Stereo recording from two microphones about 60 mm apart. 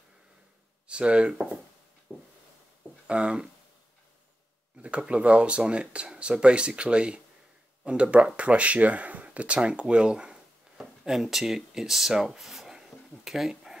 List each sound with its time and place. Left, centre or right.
0.8 s speech: centre
2.1 s a sound: centre
3.1 s speech: centre
4.8 s speech: centre